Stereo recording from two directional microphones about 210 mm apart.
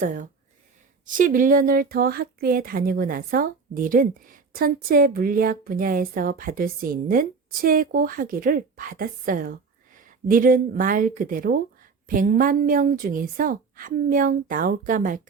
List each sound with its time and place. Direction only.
0.0 s a woman's voice: 40° right (ahead or behind)